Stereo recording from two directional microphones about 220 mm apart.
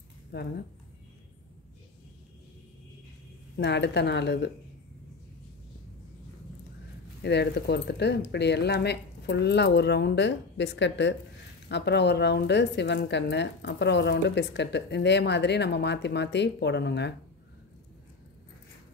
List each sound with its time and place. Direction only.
0.3 s a woman's voice: 50° left (ahead or behind)
3.5 s a woman's voice: 50° left (ahead or behind)
7.2 s a woman's voice: 50° left (ahead or behind)